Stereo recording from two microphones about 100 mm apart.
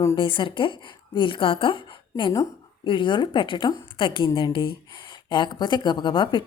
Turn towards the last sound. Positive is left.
turn(degrees=50)  # may be behind; listen again after turning